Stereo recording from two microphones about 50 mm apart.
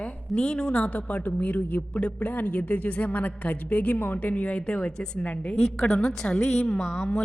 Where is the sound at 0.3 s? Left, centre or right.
Centre.